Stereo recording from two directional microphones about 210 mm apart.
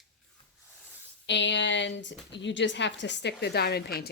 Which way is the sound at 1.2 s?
60° left (ahead or behind).